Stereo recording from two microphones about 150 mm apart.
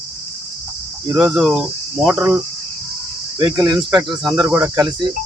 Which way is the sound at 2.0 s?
10° right (ahead or behind).